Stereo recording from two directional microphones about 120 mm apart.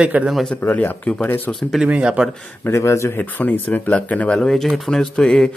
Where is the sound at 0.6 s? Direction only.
15° left (ahead or behind).